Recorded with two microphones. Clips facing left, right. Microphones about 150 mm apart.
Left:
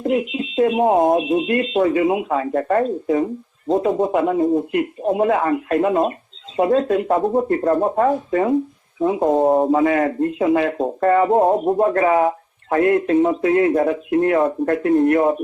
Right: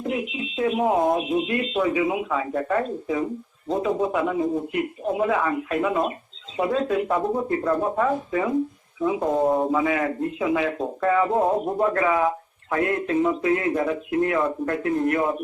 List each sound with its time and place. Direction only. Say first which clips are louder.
0.0 s speech: left 7 dB; 45° left (ahead or behind)
11.3 s a man's voice: left 6 dB; 30° left (ahead or behind)
11.8 s a man's voice: left 4 dB; 45° left (ahead or behind)